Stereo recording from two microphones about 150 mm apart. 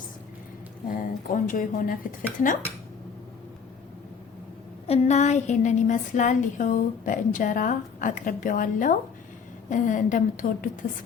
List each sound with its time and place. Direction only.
0.9 s speech: 65° left (ahead or behind)
4.9 s a woman's voice: 50° left (ahead or behind); by 10.7 s 65° left (ahead or behind)